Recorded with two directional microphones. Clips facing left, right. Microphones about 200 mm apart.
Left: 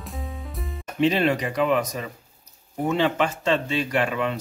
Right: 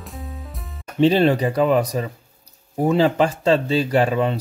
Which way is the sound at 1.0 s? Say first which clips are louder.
Right 5 dB; 30° right (ahead or behind).